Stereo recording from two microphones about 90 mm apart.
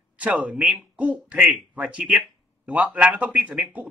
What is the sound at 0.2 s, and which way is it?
A man's voice, 15° right (ahead or behind).